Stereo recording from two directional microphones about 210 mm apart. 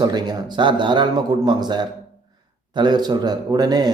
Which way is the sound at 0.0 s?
20° right (ahead or behind).